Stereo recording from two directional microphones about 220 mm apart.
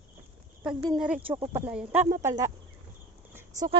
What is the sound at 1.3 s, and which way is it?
Speech, 20° right (ahead or behind).